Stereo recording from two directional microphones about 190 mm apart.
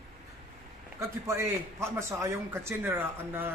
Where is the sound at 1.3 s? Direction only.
15° right (ahead or behind).